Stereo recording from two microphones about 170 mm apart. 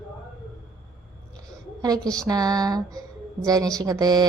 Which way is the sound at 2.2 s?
20° right (ahead or behind).